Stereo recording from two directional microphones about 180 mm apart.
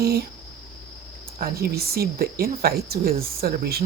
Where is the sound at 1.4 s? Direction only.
60° right (ahead or behind).